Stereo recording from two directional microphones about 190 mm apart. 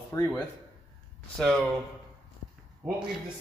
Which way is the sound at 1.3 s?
5° left (ahead or behind).